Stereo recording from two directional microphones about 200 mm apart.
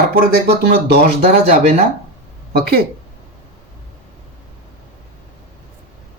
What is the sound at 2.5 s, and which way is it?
Speech, 50° right (ahead or behind).